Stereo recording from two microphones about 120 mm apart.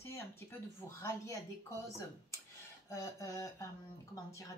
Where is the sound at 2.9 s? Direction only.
25° left (ahead or behind).